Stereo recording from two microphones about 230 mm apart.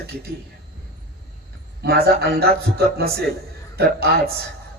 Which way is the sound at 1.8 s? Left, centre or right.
Right.